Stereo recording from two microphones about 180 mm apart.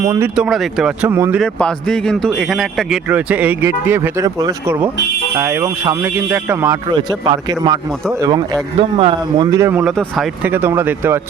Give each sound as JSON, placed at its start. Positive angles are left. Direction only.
{"t": 0.0, "sound": "speech", "side_deg": -15}
{"t": 0.3, "sound": "speech", "side_deg": -5}
{"t": 1.4, "sound": "speech", "side_deg": 5}
{"t": 6.8, "sound": "speech", "side_deg": -25}
{"t": 9.5, "sound": "speech", "side_deg": -15}
{"t": 9.8, "sound": "speech", "side_deg": 0}
{"t": 10.5, "sound": "speech", "side_deg": -10}